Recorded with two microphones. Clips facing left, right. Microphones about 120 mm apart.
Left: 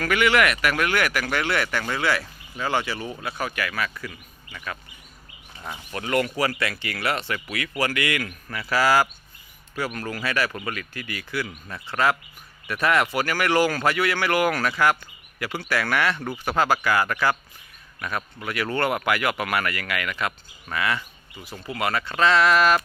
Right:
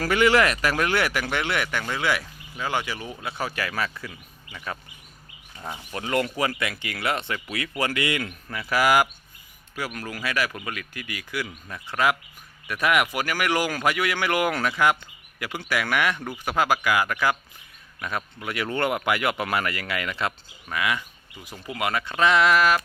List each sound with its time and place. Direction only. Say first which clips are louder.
0.0 s speech: right 1 dB; 30° right (ahead or behind); by 3.2 s 10° right (ahead or behind)
3.2 s speech: even; 25° right (ahead or behind)
4.0 s speech: left 2 dB; 20° right (ahead or behind)
18.0 s speech: left 1 dB; 20° right (ahead or behind)
20.7 s speech: left 1 dB; 10° right (ahead or behind)